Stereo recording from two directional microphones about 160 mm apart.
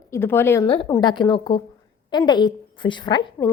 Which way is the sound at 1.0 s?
30° left (ahead or behind).